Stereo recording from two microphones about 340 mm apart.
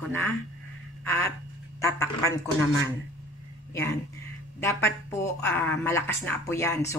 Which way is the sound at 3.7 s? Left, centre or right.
Centre.